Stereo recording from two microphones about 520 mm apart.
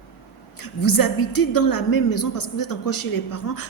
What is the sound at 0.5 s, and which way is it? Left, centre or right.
A woman's voice, left.